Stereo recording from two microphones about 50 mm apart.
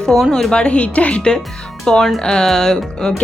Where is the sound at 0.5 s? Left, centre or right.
Left.